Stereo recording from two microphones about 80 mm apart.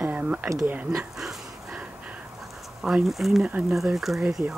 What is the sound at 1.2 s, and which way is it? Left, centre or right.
Dog, centre.